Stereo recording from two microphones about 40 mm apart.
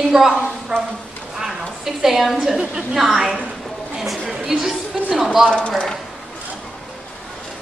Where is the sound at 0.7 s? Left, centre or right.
Right.